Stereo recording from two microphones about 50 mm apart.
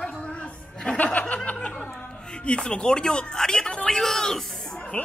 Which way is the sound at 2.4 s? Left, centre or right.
Centre.